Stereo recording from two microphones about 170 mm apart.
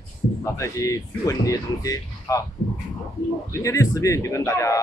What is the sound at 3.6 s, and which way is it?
Speech, 20° left (ahead or behind).